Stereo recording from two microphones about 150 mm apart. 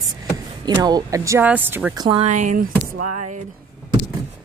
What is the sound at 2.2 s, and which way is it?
Speech, 55° right (ahead or behind).